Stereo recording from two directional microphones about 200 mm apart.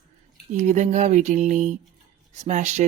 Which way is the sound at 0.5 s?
35° right (ahead or behind).